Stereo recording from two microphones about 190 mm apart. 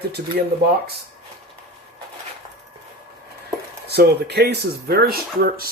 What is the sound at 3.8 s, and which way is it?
Speech, 60° right (ahead or behind).